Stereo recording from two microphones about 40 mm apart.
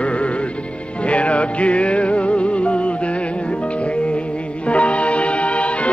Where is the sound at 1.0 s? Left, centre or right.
Left.